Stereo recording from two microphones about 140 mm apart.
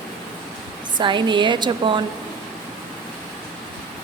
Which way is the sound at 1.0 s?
35° right (ahead or behind).